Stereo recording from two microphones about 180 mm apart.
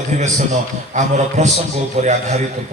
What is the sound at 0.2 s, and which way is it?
A man's voice, 40° right (ahead or behind).